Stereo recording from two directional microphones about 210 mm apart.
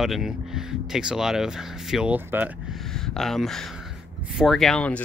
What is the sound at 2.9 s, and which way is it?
Speech, centre (ahead or behind).